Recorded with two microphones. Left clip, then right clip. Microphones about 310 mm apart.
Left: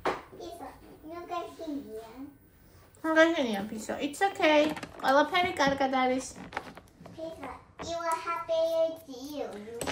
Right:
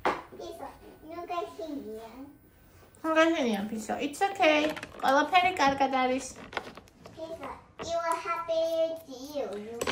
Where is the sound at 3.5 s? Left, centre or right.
Centre.